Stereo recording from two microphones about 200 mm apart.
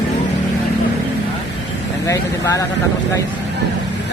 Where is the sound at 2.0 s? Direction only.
15° left (ahead or behind).